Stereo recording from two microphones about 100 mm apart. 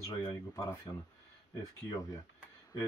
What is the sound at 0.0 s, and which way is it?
Speech, 35° left (ahead or behind).